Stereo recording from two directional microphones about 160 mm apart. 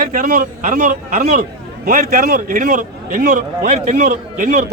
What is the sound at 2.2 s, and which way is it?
A man's voice, 50° right (ahead or behind).